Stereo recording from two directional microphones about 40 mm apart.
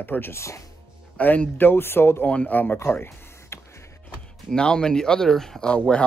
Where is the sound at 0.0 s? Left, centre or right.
Left.